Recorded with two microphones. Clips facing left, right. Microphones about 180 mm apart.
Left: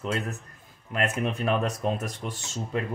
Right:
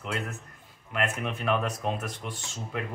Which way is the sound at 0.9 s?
40° left (ahead or behind).